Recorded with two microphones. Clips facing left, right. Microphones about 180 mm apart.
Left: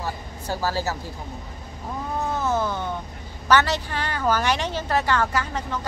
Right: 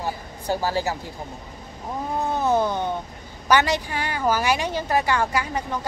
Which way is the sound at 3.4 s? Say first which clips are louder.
Even; 15° right (ahead or behind).